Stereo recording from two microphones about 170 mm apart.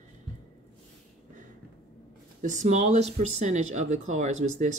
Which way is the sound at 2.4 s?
45° right (ahead or behind).